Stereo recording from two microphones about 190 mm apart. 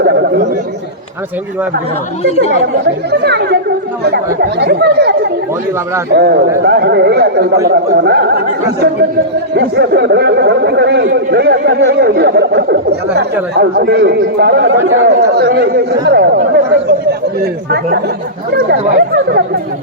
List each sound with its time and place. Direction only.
2.8 s speech: 60° right (ahead or behind)